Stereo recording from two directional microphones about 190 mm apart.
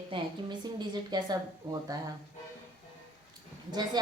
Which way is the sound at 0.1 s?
25° right (ahead or behind).